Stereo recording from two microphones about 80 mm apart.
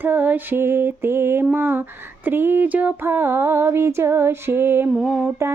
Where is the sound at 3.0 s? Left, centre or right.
Right.